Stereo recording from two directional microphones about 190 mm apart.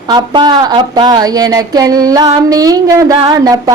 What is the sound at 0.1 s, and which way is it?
A woman's voice, 20° right (ahead or behind).